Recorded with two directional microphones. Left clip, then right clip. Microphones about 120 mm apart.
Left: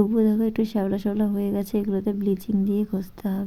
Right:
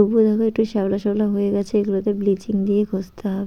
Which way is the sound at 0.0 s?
15° right (ahead or behind).